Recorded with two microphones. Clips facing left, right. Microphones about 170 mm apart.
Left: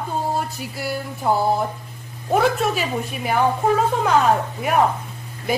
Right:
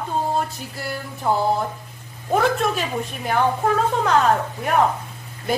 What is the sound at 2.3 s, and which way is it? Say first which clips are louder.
A woman's voice: left 1 dB; 5° left (ahead or behind).